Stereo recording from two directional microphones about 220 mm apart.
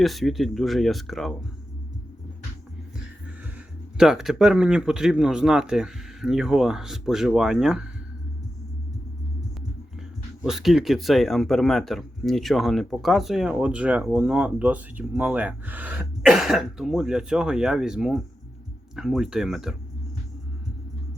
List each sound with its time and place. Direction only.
0.0 s speech: centre (ahead or behind)
3.9 s speech: 5° right (ahead or behind)
10.4 s speech: centre (ahead or behind)